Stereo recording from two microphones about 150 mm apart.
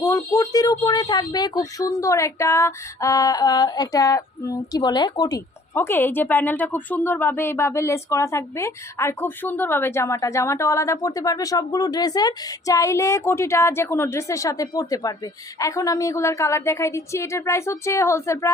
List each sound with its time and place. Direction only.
0.0 s speech: 20° left (ahead or behind)